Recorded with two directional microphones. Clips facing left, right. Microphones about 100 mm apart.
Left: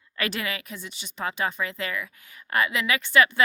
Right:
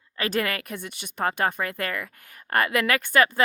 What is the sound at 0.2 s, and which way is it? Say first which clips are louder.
Speech: right 4 dB; 45° right (ahead or behind).